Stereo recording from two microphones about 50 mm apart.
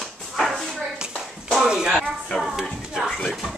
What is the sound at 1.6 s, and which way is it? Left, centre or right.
Clapping, centre.